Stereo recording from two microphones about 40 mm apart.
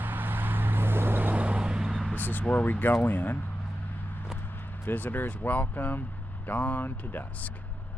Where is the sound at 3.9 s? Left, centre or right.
Left.